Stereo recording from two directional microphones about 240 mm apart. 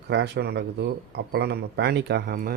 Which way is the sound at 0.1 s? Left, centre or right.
Right.